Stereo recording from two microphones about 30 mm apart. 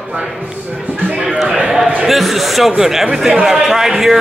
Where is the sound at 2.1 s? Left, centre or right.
Centre.